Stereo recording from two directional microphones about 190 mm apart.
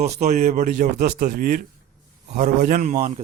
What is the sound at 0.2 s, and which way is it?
Speech, 40° right (ahead or behind).